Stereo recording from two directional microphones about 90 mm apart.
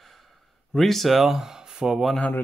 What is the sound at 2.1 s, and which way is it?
Speech, 15° left (ahead or behind).